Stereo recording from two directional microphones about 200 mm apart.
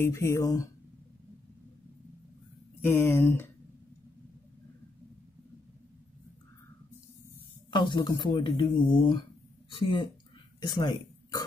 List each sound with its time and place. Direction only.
0.0 s speech: 15° left (ahead or behind)
2.8 s speech: 10° left (ahead or behind)
7.7 s speech: 25° left (ahead or behind)